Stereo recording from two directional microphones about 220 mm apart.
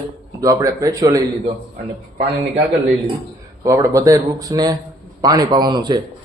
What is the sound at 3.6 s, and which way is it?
Speech, 15° right (ahead or behind).